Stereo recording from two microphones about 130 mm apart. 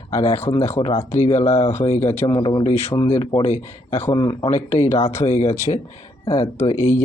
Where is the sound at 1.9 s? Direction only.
55° left (ahead or behind).